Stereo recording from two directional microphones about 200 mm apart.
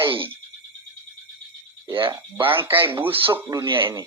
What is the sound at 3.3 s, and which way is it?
Speech, 10° right (ahead or behind).